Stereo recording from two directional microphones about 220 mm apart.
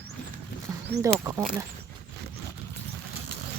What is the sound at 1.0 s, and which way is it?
Speech, 15° right (ahead or behind).